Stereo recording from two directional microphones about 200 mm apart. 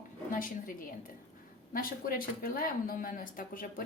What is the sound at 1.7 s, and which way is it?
Speech, 45° left (ahead or behind).